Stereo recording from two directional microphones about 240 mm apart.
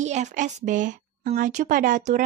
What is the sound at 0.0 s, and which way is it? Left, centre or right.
Speech, right.